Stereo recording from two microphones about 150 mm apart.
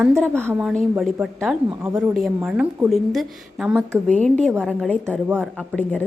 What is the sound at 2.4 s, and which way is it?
A woman's voice, 10° right (ahead or behind).